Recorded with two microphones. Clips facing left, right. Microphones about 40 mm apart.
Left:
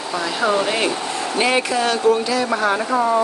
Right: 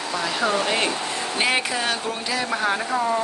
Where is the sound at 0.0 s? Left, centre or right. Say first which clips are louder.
Left 3 dB; centre.